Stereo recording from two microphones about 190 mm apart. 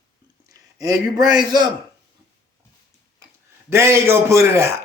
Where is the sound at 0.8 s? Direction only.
20° right (ahead or behind).